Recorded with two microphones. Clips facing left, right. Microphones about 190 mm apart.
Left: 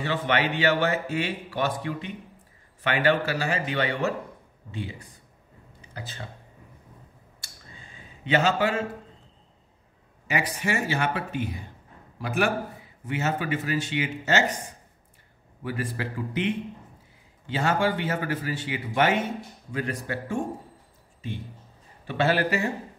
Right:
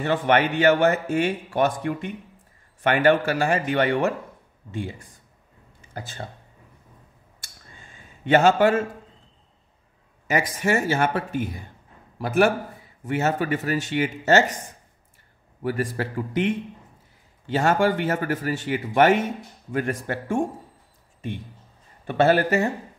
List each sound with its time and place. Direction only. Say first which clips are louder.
0.0 s a man's voice: right 5 dB; 50° right (ahead or behind)
7.3 s a sound: even; 50° right (ahead or behind)
10.2 s a man's voice: right 5 dB; 45° right (ahead or behind)
15.6 s a man's voice: right 5 dB; 45° right (ahead or behind)
22.0 s a man's voice: right 5 dB; 50° right (ahead or behind)